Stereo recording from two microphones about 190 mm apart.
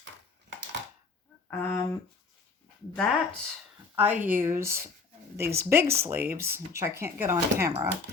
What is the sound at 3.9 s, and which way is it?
Speech, 10° right (ahead or behind).